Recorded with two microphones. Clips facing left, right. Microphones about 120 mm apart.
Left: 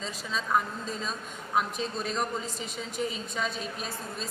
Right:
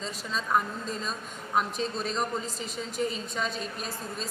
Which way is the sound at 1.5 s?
5° left (ahead or behind).